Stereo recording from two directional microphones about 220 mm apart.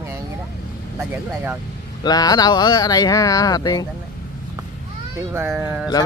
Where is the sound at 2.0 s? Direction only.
20° left (ahead or behind).